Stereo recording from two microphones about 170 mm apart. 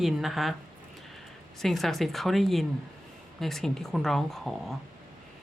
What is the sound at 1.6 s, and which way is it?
Speech, centre (ahead or behind).